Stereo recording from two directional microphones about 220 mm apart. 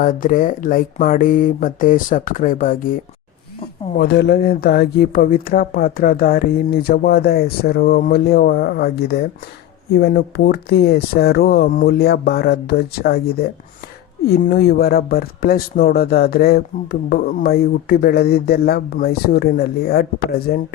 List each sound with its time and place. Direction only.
0.0 s speech: 40° left (ahead or behind)
3.9 s speech: 50° left (ahead or behind)